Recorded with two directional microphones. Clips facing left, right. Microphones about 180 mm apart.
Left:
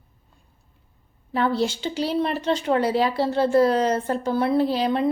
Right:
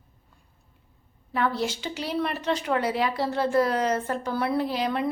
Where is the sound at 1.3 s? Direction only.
30° left (ahead or behind).